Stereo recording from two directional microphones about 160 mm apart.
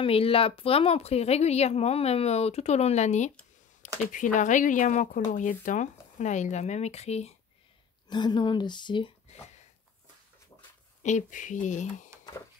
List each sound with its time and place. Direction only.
0.0 s speech: 35° left (ahead or behind)
8.1 s speech: 30° left (ahead or behind)
11.0 s speech: 50° left (ahead or behind)